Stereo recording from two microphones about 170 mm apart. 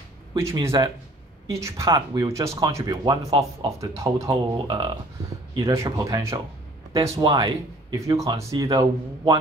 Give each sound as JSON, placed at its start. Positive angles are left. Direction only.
{"t": 0.4, "sound": "speech", "side_deg": -15}
{"t": 5.6, "sound": "speech", "side_deg": -15}